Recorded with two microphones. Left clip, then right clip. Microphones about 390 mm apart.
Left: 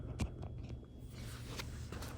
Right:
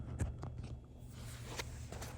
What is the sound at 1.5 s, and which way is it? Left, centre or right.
Walk, centre.